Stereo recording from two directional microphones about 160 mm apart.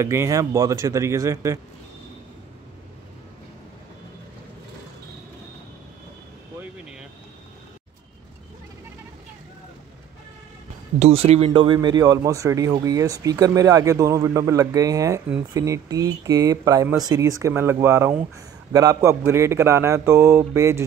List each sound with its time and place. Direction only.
0.0 s speech: 15° right (ahead or behind)
6.6 s vehicle: 5° right (ahead or behind)
11.0 s speech: 40° right (ahead or behind)
11.6 s a man's voice: 25° right (ahead or behind)